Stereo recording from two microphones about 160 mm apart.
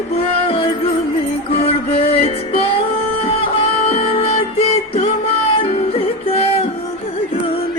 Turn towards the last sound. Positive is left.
turn(degrees=35)  # may be behind; listen again after turning